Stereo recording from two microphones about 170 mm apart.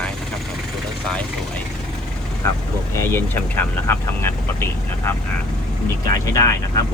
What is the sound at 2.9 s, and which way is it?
Speech, 15° left (ahead or behind).